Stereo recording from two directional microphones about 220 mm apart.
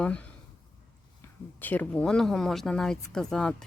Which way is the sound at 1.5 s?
10° left (ahead or behind).